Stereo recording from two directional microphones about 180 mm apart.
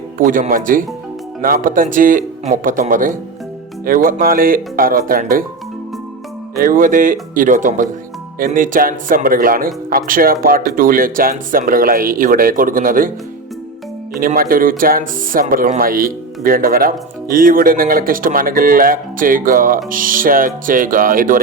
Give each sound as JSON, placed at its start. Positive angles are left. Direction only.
{"t": 0.2, "sound": "speech", "side_deg": -45}
{"t": 6.6, "sound": "speech", "side_deg": -50}
{"t": 14.2, "sound": "speech", "side_deg": -50}